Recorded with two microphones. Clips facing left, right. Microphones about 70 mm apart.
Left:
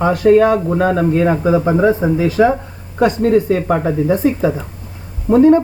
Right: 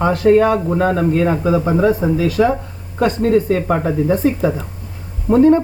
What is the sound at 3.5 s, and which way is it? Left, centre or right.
Speech, centre.